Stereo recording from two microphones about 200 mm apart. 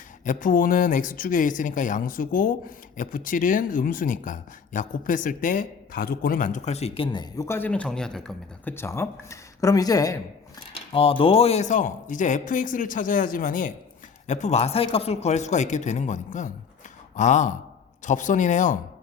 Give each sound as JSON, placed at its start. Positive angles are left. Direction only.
{"t": 0.3, "sound": "speech", "side_deg": 40}